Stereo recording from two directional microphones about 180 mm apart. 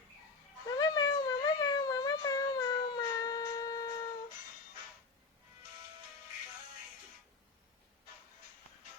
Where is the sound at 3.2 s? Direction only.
20° left (ahead or behind).